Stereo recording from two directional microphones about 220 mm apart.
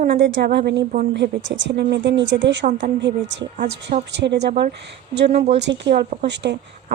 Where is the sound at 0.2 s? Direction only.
55° right (ahead or behind).